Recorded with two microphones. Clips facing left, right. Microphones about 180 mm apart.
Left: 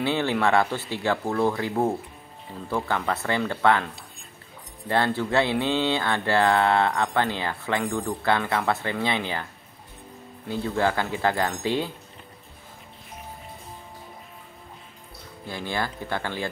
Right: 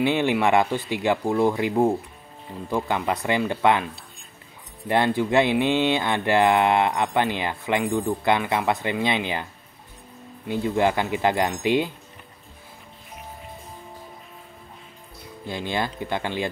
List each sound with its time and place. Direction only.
0.0 s speech: 15° right (ahead or behind)
10.5 s speech: 15° right (ahead or behind)
15.4 s speech: 20° right (ahead or behind)